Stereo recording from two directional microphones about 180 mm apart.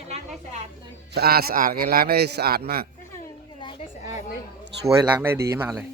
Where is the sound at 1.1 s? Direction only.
60° right (ahead or behind).